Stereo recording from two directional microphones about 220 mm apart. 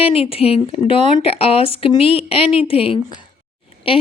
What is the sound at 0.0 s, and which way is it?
Speech, 25° left (ahead or behind).